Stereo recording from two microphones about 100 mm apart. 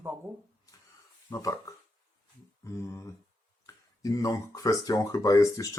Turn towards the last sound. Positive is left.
turn(degrees=35)  # may be behind; listen again after turning